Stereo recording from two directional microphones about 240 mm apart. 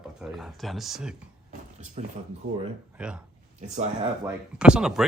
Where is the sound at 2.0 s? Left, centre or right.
Right.